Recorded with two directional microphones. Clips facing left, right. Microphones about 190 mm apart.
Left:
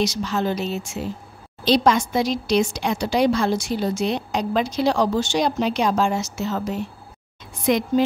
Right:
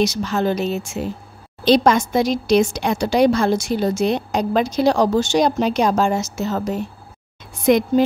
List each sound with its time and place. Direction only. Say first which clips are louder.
0.0 s speech: right 3 dB; 50° right (ahead or behind)